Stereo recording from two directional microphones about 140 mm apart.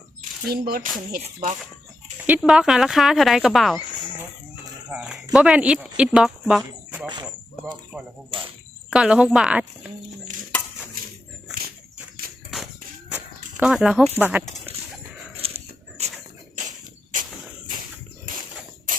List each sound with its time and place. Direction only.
0.2 s speech: 90° right
1.2 s speech: 55° right (ahead or behind)
2.4 s speech: 5° right (ahead or behind)
4.2 s chicken: 10° right (ahead or behind)
5.3 s speech: 5° right (ahead or behind)
8.3 s speech: 35° right (ahead or behind)
8.9 s speech: 5° right (ahead or behind)
12.5 s music: centre (ahead or behind)
13.6 s speech: 5° right (ahead or behind)
15.4 s dog: 45° right (ahead or behind)
17.1 s cricket: 70° right (ahead or behind)